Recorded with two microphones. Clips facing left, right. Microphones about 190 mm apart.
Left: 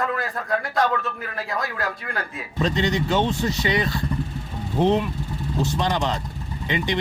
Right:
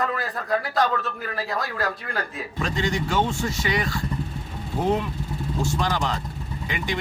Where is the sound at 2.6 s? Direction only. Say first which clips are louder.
Left 4 dB; 20° left (ahead or behind).